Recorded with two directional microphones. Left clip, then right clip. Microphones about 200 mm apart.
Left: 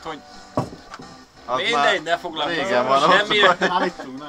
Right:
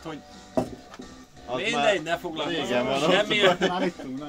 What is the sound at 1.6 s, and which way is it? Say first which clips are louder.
Speech: left 4 dB; 55° right (ahead or behind).